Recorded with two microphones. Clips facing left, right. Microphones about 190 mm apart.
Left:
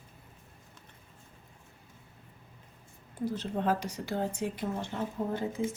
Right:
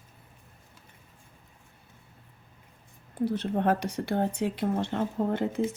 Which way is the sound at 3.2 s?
60° right (ahead or behind).